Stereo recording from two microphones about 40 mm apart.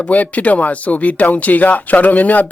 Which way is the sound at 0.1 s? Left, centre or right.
Left.